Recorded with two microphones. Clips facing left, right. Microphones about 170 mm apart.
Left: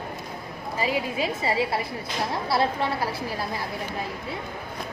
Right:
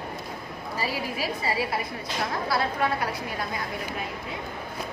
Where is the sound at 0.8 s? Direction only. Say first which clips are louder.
Left 4 dB; 20° left (ahead or behind).